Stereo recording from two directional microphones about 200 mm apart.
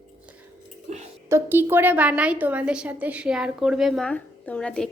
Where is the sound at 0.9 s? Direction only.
35° right (ahead or behind).